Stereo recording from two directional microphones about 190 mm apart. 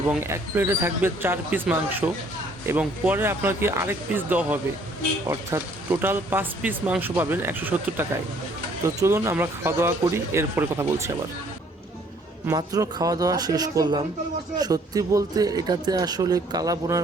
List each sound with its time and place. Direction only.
0.1 s speech: 15° right (ahead or behind)
12.5 s speech: 20° right (ahead or behind)